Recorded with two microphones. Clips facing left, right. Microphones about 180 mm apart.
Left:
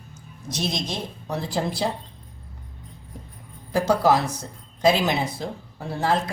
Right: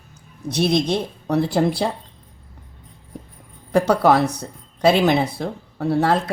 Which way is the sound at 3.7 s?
60° right (ahead or behind).